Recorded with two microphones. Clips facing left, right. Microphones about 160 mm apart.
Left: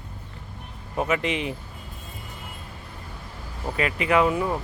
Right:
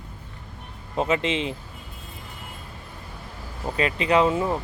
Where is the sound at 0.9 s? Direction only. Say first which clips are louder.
Right 1 dB; 25° right (ahead or behind).